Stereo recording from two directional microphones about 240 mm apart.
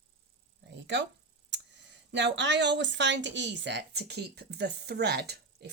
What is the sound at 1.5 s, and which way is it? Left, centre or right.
Speech, right.